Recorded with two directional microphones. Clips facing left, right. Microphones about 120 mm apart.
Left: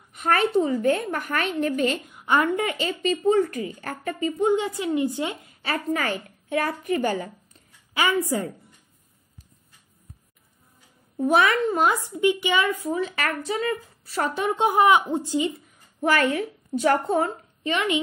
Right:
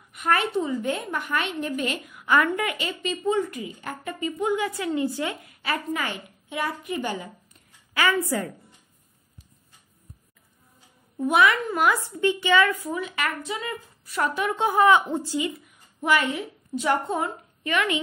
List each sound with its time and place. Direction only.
0.1 s a woman's voice: 35° left (ahead or behind)
1.8 s a woman's voice: 30° left (ahead or behind)
5.6 s a woman's voice: 40° left (ahead or behind)
7.9 s a woman's voice: 20° left (ahead or behind)
11.1 s a woman's voice: 35° left (ahead or behind); by 12.9 s 20° left (ahead or behind)
12.9 s speech: 35° left (ahead or behind)
14.6 s speech: 15° left (ahead or behind)
16.0 s a woman's voice: 50° left (ahead or behind)
17.6 s a woman's voice: 25° left (ahead or behind)